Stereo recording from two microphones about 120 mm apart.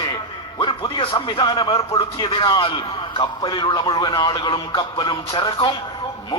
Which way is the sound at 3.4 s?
35° left (ahead or behind).